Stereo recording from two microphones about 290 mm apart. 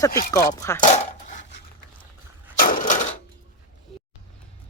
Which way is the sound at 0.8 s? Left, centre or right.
Left.